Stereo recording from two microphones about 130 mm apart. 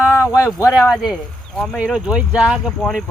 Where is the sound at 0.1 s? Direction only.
25° left (ahead or behind).